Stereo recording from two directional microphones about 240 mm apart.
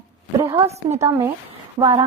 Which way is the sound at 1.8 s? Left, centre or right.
Centre.